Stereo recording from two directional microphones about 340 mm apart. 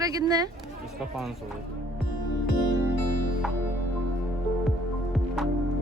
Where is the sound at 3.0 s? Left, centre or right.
Right.